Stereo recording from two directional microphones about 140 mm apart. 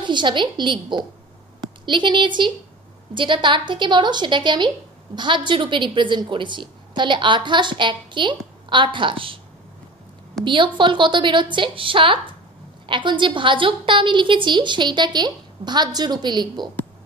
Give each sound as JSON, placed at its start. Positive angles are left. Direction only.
{"t": 0.0, "sound": "a woman's voice", "side_deg": -35}
{"t": 10.4, "sound": "a woman's voice", "side_deg": -35}